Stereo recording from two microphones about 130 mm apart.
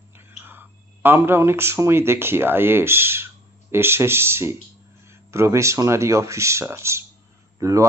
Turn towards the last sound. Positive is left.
turn(degrees=-25)  # may be behind; listen again after turning